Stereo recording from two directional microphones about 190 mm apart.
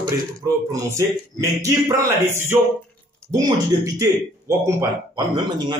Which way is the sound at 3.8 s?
15° right (ahead or behind).